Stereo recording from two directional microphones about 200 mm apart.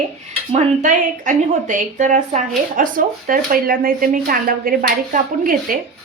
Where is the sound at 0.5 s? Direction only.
40° right (ahead or behind).